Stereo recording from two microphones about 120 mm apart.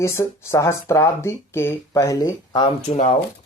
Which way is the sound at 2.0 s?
30° left (ahead or behind).